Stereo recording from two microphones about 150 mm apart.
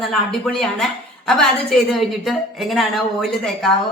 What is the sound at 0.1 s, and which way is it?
Speech, centre (ahead or behind).